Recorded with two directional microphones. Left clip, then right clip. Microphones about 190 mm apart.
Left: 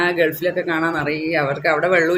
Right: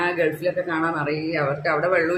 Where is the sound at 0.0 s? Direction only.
45° left (ahead or behind).